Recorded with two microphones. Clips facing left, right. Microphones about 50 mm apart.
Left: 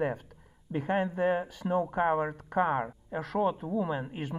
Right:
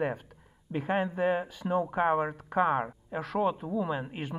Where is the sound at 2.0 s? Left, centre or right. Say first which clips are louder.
Right 1 dB; right.